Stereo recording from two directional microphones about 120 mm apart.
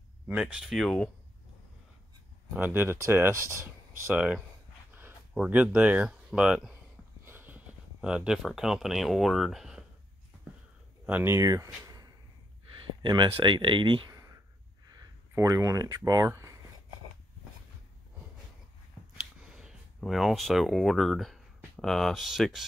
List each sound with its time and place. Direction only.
0.3 s speech: 10° right (ahead or behind)
2.5 s speech: 15° right (ahead or behind)
4.1 s speech: 10° right (ahead or behind)
11.1 s speech: 15° right (ahead or behind)
11.3 s speech: 30° right (ahead or behind); by 14.0 s 45° right (ahead or behind)
14.1 s a sound: 30° right (ahead or behind)
15.3 s speech: 25° right (ahead or behind)
19.1 s a sound: 5° right (ahead or behind)
20.0 s speech: centre (ahead or behind)